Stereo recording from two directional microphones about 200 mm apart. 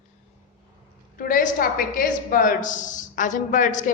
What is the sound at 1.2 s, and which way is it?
A woman's voice, 45° left (ahead or behind).